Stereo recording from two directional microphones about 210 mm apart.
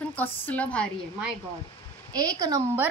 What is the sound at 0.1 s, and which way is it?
Speech, 5° left (ahead or behind).